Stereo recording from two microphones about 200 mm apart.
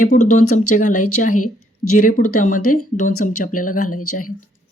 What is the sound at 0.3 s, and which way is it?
Speech, 40° left (ahead or behind).